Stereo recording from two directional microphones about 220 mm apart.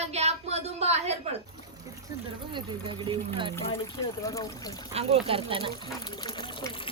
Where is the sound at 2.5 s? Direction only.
20° right (ahead or behind).